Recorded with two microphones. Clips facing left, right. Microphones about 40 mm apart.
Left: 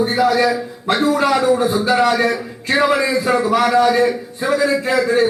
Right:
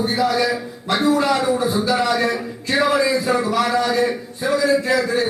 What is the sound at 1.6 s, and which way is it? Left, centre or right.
A man's voice, left.